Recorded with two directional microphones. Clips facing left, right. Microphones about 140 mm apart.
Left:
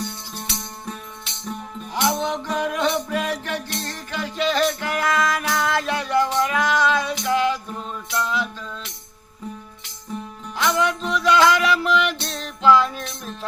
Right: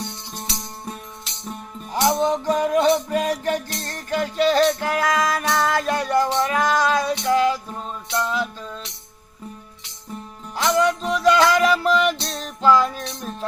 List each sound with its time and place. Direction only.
1.9 s music: 40° right (ahead or behind)
10.6 s music: 40° right (ahead or behind)